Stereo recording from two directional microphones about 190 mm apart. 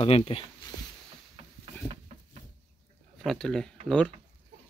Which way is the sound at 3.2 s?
Centre (ahead or behind).